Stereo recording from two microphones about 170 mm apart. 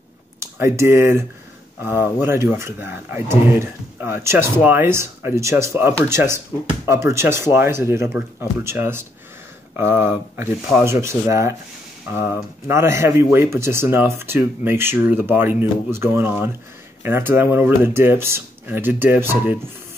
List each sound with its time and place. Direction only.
0.4 s speech: 15° right (ahead or behind)